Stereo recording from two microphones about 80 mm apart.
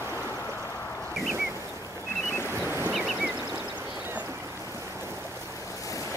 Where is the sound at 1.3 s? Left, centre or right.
Right.